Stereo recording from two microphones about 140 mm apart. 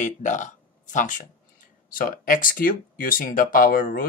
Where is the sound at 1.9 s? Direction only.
80° left.